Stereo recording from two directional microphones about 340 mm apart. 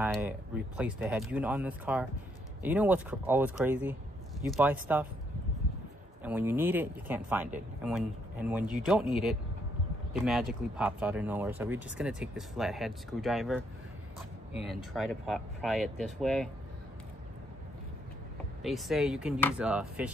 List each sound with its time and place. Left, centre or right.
0.0 s speech: centre
6.2 s speech: centre
14.9 s speech: centre
18.6 s speech: centre